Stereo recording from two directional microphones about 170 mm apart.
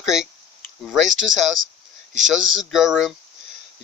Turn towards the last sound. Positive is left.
turn(degrees=0)  # may be behind; listen again after turning